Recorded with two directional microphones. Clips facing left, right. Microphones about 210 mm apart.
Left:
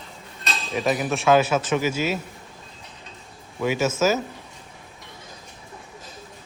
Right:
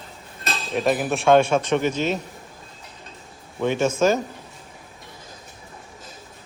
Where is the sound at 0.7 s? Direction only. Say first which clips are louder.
Right 2 dB; centre (ahead or behind).